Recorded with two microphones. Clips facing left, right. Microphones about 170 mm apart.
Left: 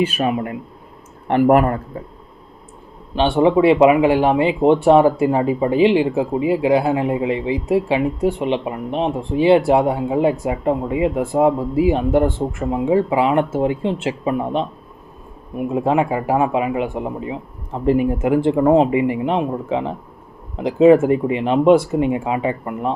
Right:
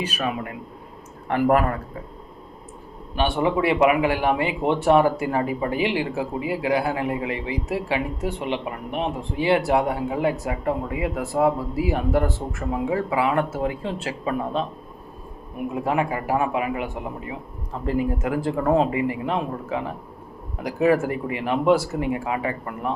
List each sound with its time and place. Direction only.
0.1 s speech: 30° left (ahead or behind)
3.2 s speech: 25° left (ahead or behind)